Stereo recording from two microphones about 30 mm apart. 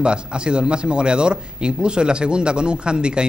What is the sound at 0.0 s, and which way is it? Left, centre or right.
A man's voice, right.